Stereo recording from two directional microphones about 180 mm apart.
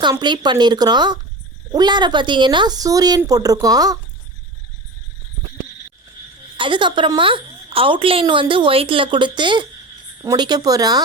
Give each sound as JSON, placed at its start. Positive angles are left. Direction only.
{"t": 0.0, "sound": "a woman's voice", "side_deg": -25}
{"t": 6.6, "sound": "a woman's voice", "side_deg": -25}